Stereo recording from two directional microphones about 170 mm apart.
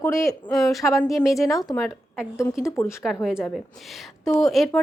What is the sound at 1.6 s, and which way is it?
Speech, 20° left (ahead or behind).